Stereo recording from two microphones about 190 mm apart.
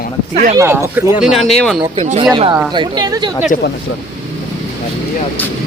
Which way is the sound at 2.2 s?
25° right (ahead or behind).